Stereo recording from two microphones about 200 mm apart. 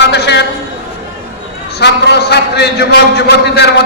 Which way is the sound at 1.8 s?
55° left (ahead or behind).